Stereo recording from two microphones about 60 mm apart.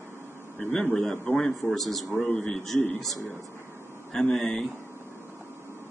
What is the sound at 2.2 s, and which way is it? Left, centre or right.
Speech, centre.